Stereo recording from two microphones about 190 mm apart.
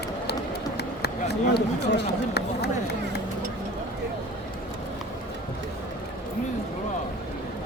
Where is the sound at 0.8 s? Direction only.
60° left (ahead or behind).